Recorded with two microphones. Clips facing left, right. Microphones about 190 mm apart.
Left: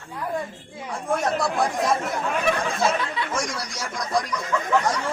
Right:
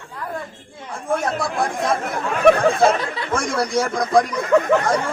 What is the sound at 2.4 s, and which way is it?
Speech, 55° right (ahead or behind).